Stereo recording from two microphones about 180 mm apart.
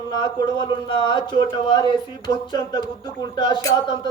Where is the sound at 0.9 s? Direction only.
25° left (ahead or behind).